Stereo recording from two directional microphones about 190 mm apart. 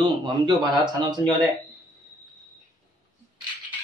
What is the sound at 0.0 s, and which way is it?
Speech, 20° right (ahead or behind).